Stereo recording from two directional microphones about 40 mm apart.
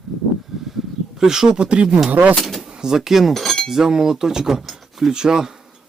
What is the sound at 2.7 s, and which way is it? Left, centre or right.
Chink, centre.